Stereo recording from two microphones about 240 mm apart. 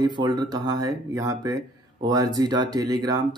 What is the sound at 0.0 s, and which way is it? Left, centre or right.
Speech, centre.